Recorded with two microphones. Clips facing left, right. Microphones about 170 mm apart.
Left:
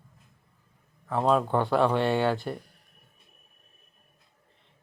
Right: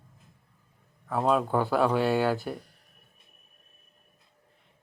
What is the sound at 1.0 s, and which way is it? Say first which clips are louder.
Speech: left 1 dB; 5° right (ahead or behind).